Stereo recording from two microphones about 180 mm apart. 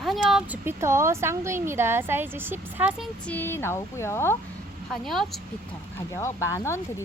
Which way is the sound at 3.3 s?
10° left (ahead or behind).